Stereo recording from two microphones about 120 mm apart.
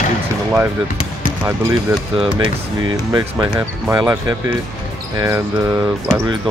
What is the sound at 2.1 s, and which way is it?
Speech, 45° right (ahead or behind).